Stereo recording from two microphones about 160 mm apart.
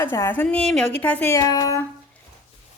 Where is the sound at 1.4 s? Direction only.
25° left (ahead or behind).